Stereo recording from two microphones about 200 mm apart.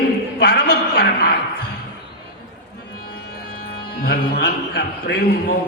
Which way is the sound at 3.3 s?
50° left (ahead or behind).